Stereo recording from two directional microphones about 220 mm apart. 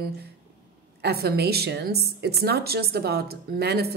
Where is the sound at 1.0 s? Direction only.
45° right (ahead or behind).